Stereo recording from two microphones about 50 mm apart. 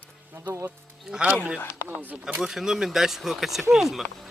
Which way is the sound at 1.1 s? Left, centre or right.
Right.